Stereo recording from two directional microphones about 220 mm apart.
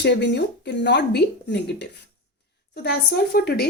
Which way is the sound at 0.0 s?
50° left (ahead or behind).